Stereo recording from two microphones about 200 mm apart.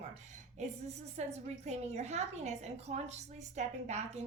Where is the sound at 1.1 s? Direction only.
35° right (ahead or behind).